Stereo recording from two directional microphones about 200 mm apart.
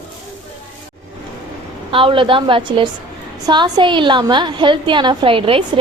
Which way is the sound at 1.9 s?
25° right (ahead or behind).